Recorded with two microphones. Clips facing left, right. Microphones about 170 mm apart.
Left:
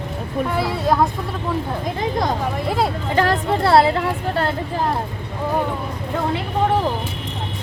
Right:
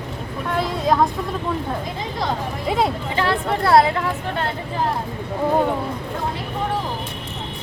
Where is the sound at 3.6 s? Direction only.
30° left (ahead or behind).